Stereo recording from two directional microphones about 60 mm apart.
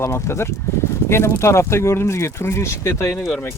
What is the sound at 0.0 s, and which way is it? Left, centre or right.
Speech, left.